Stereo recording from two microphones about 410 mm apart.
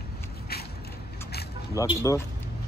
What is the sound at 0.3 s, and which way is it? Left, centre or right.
Vehicle, left.